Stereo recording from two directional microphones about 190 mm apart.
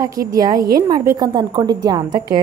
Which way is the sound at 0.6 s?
50° right (ahead or behind).